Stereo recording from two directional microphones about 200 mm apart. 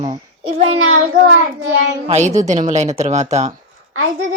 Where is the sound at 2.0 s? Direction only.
35° right (ahead or behind).